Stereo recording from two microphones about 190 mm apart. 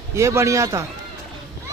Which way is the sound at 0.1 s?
15° right (ahead or behind).